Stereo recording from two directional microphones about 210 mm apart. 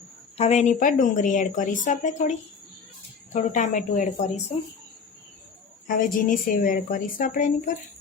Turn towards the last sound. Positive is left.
turn(degrees=40)  # may be behind; listen again after turning